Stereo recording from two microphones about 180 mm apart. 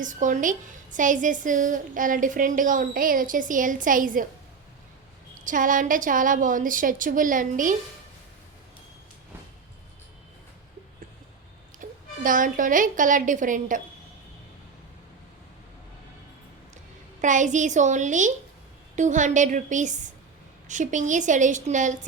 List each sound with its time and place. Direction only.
0.0 s a woman's voice: 45° right (ahead or behind)
5.5 s a woman's voice: 45° right (ahead or behind)
11.8 s a woman's voice: 50° right (ahead or behind)
17.2 s a woman's voice: 45° right (ahead or behind)